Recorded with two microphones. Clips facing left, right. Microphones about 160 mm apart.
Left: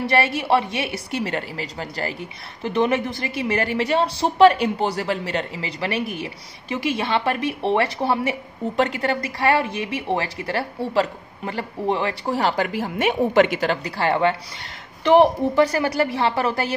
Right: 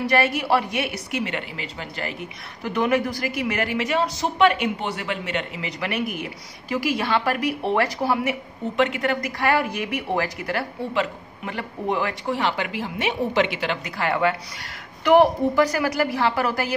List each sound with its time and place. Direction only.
0.0 s a woman's voice: 30° left (ahead or behind)